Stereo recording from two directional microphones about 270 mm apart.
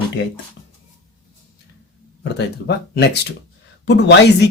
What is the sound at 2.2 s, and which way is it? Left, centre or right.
Speech, left.